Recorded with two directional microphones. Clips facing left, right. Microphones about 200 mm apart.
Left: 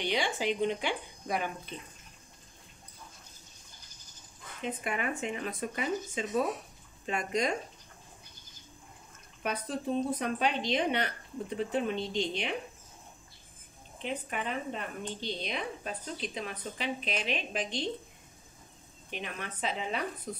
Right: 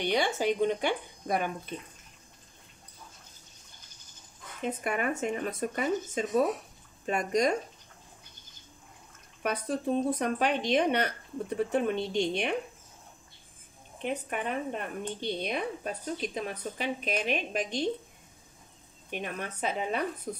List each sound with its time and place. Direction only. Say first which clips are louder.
0.0 s speech: right 4 dB; 45° right (ahead or behind)
4.6 s speech: right 3 dB; 45° right (ahead or behind)
9.4 s speech: right 3 dB; 50° right (ahead or behind)
14.0 s speech: right 3 dB; 50° right (ahead or behind)
19.0 s speech: right 4 dB; 50° right (ahead or behind)